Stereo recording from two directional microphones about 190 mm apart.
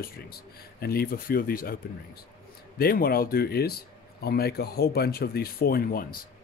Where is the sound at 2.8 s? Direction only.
50° left (ahead or behind).